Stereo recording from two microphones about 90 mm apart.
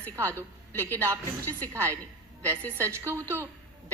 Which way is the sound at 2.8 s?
30° right (ahead or behind).